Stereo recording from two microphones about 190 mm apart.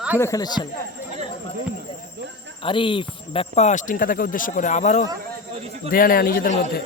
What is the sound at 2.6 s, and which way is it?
Speech, 25° left (ahead or behind).